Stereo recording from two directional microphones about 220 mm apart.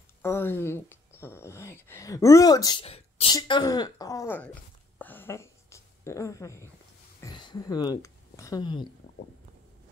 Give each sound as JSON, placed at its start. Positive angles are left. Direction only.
{"t": 0.2, "sound": "speech", "side_deg": 10}
{"t": 4.9, "sound": "a sound", "side_deg": 10}
{"t": 7.2, "sound": "speech", "side_deg": 20}